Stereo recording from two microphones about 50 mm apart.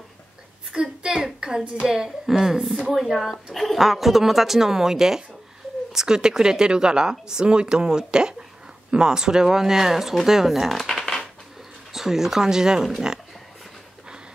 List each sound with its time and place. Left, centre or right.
0.7 s speech: centre